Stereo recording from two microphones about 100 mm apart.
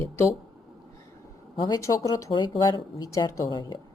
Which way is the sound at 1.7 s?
30° left (ahead or behind).